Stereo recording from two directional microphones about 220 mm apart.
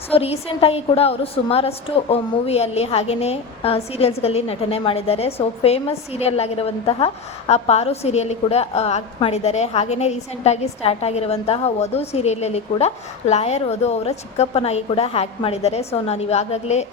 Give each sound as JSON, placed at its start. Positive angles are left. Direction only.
{"t": 0.1, "sound": "a woman's voice", "side_deg": 25}